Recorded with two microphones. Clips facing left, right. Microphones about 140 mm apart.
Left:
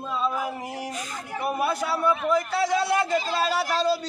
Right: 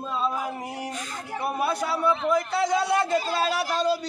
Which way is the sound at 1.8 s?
15° right (ahead or behind).